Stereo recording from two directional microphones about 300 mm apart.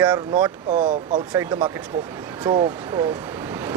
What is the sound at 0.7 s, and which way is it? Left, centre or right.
Speech, right.